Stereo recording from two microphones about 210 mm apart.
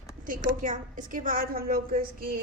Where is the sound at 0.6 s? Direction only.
40° right (ahead or behind).